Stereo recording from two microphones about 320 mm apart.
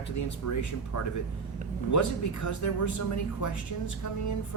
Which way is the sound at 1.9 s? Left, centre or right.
Left.